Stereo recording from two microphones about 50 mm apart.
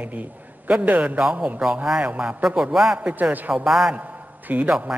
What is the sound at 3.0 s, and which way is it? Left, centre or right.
Speech, right.